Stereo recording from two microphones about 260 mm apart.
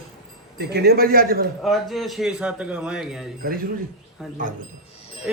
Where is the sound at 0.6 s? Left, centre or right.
Right.